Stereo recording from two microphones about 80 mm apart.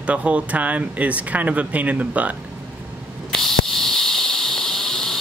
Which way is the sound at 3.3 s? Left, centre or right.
Centre.